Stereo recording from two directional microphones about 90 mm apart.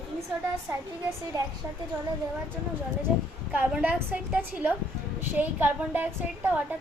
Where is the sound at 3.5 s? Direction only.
20° right (ahead or behind).